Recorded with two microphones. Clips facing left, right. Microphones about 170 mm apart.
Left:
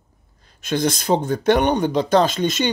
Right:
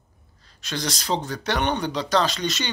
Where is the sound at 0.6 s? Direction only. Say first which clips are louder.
Left 8 dB; 50° left (ahead or behind).